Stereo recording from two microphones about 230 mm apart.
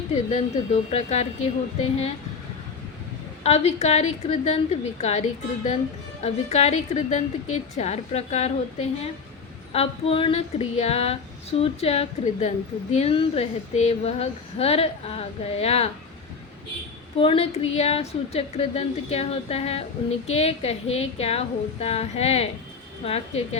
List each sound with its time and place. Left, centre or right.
0.3 s a woman's voice: left
3.4 s a woman's voice: left
6.2 s a woman's voice: left
17.2 s a woman's voice: left